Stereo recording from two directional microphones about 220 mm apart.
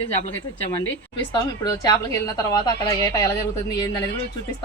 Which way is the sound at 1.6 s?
15° left (ahead or behind).